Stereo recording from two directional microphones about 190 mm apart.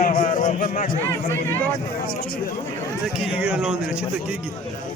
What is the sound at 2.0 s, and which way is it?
Speech, 50° left (ahead or behind).